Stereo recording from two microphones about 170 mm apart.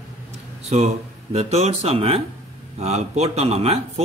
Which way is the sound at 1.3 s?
35° right (ahead or behind).